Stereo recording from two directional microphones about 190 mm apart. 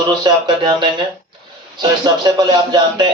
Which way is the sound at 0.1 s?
25° right (ahead or behind).